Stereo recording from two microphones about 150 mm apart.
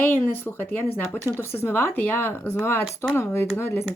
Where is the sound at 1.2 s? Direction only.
15° right (ahead or behind).